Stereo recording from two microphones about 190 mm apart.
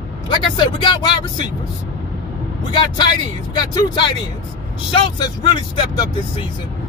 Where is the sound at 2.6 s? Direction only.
25° left (ahead or behind).